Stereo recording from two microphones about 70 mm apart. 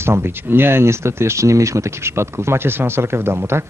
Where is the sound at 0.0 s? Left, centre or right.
Right.